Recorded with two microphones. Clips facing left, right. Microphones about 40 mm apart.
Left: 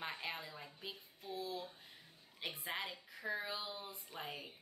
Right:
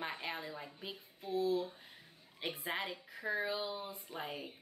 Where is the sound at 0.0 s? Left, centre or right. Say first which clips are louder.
Right 3 dB; centre.